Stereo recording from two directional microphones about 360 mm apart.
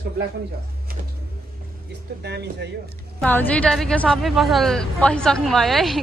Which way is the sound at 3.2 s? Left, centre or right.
Centre.